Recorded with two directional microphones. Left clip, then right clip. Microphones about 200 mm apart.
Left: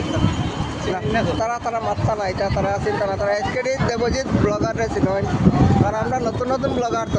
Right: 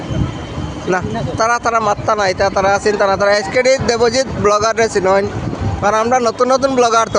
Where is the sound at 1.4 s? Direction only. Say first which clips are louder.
Right 9 dB; 45° right (ahead or behind).